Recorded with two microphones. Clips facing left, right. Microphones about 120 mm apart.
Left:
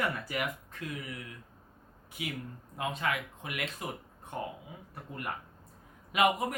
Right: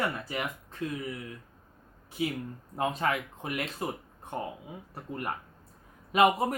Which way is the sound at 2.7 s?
40° right (ahead or behind).